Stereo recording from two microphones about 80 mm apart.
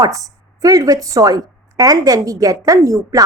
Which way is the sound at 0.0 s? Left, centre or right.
Right.